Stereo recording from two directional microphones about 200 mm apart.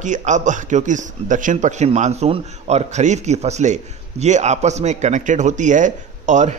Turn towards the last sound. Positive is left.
turn(degrees=-40)  # may be behind; listen again after turning